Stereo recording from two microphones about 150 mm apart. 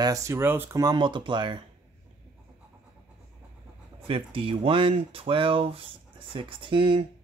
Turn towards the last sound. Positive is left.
turn(degrees=-35)  # may be behind; listen again after turning